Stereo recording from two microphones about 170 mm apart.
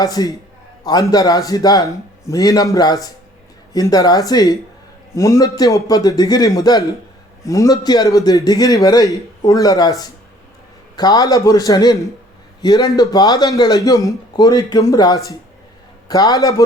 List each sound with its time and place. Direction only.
0.0 s a man's voice: 20° left (ahead or behind)